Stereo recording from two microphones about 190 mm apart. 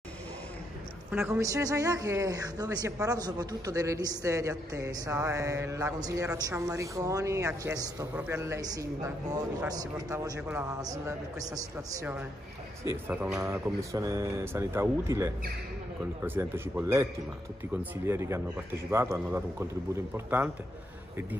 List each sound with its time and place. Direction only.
1.1 s speech: 5° right (ahead or behind)
1.4 s speech: 15° right (ahead or behind)